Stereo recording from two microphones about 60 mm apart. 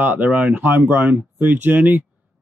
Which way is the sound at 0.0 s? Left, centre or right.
Right.